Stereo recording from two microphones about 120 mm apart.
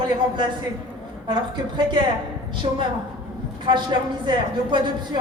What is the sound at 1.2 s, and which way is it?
A woman's voice, 40° right (ahead or behind).